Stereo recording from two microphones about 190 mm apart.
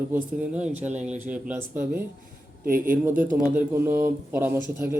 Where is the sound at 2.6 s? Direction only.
45° right (ahead or behind).